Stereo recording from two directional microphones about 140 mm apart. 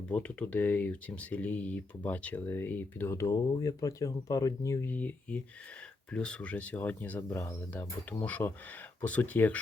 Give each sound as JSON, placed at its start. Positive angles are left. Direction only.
{"t": 0.1, "sound": "speech", "side_deg": 10}